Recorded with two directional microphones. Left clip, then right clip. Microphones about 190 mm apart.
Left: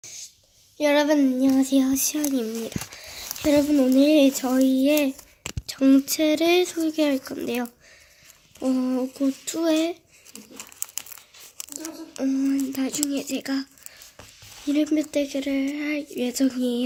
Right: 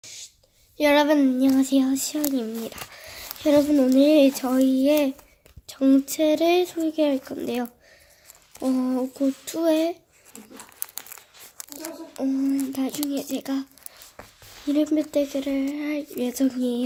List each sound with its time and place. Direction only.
0.0 s a sound: 15° right (ahead or behind)
0.8 s speech: 20° right (ahead or behind)
1.9 s speech: 10° left (ahead or behind)
2.6 s speech: 10° right (ahead or behind)
11.1 s a sound: 25° right (ahead or behind)
12.2 s speech: 10° left (ahead or behind)
14.7 s speech: centre (ahead or behind)